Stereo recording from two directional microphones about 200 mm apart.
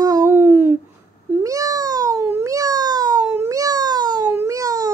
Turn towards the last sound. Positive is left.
turn(degrees=-15)  # may be behind; listen again after turning